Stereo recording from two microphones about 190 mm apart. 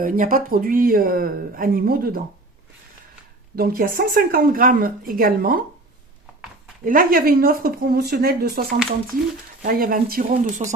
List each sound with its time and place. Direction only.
0.0 s speech: 50° right (ahead or behind)
3.5 s speech: 50° right (ahead or behind)
6.8 s speech: 45° right (ahead or behind)
9.6 s speech: 50° right (ahead or behind)